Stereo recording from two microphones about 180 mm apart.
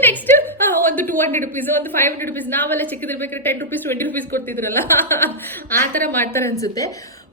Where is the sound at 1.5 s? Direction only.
10° left (ahead or behind).